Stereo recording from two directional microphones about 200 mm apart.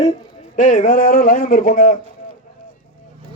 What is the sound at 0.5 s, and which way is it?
A man's voice, 40° left (ahead or behind).